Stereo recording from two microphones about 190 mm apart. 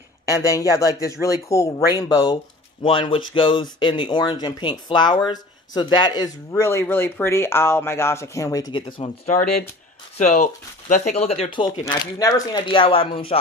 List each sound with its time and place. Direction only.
0.3 s speech: 15° left (ahead or behind)